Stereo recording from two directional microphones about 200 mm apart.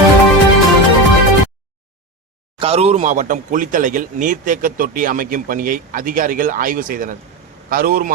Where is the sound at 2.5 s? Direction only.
30° right (ahead or behind).